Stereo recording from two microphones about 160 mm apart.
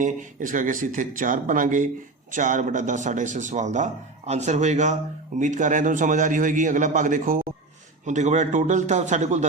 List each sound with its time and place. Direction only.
0.0 s a man's voice: 55° right (ahead or behind)